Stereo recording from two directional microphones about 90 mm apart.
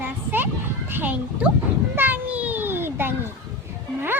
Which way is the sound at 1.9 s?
20° right (ahead or behind).